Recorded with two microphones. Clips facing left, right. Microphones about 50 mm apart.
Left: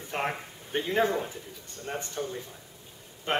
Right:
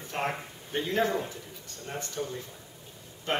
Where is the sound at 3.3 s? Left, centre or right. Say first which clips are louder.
Left 1 dB; left.